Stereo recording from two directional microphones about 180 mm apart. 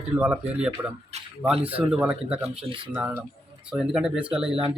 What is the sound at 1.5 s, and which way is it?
Speech, 30° right (ahead or behind).